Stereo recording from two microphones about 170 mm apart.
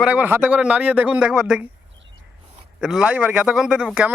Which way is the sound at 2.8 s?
5° right (ahead or behind).